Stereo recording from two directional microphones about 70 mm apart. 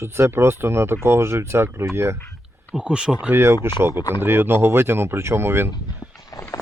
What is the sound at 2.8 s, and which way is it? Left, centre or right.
Speech, centre.